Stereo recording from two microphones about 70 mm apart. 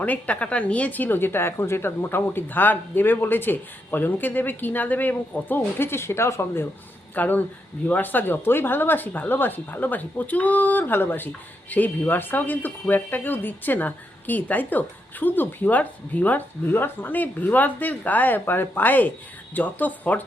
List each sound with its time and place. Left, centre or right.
0.0 s speech: left
7.2 s speech: left